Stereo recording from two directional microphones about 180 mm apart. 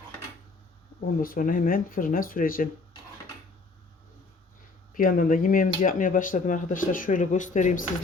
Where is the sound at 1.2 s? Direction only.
50° left (ahead or behind).